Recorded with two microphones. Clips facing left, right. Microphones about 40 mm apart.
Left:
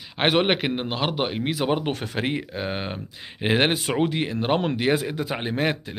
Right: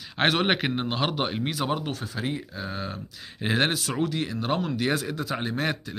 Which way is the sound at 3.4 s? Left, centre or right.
Left.